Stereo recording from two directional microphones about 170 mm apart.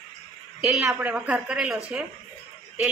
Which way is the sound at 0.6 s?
Centre (ahead or behind).